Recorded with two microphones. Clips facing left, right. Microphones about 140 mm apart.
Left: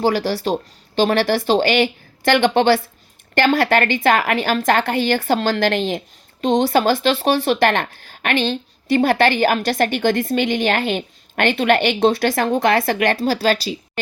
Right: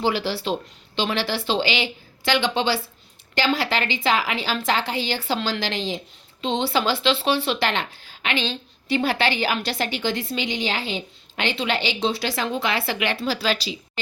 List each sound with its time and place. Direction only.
0.0 s speech: 45° left (ahead or behind)